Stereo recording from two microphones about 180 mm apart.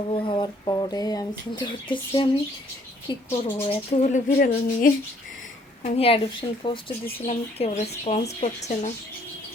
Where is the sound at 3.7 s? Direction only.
40° left (ahead or behind).